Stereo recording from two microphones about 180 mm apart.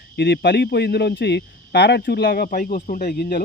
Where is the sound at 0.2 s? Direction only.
70° left (ahead or behind).